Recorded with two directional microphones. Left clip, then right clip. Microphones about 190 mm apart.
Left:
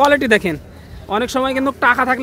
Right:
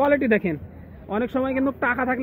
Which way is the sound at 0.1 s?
20° left (ahead or behind).